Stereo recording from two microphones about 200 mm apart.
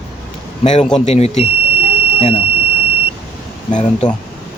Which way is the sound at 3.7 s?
35° left (ahead or behind).